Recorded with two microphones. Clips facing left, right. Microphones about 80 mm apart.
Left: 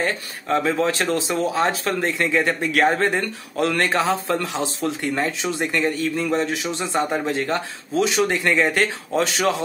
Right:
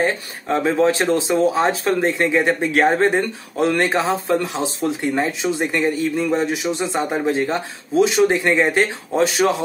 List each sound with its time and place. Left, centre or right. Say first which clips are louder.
0.0 s speech: right 4 dB; right